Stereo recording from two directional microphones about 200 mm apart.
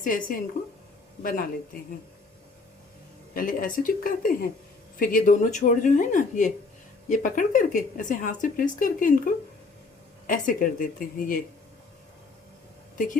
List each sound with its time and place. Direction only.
0.0 s a woman's voice: 40° left (ahead or behind)
3.3 s a woman's voice: 45° left (ahead or behind)